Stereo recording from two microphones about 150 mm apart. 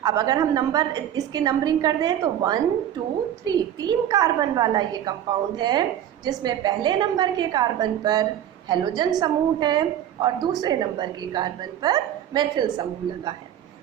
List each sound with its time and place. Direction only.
0.0 s a woman's voice: 25° right (ahead or behind)